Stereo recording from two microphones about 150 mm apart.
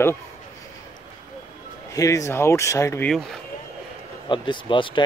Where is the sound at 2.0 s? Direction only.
20° left (ahead or behind).